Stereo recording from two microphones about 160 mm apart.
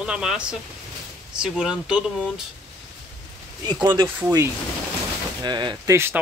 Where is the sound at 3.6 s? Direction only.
25° right (ahead or behind).